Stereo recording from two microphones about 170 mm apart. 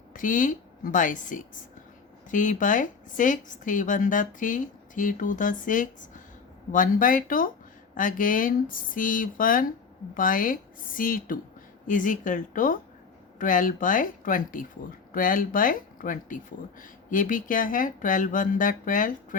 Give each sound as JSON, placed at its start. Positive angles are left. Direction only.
{"t": 0.1, "sound": "a woman's voice", "side_deg": 50}